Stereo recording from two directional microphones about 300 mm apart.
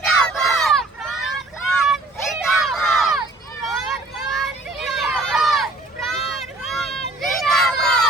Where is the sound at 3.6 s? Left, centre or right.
Centre.